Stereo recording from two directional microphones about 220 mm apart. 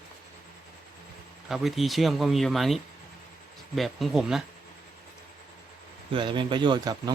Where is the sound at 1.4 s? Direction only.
Centre (ahead or behind).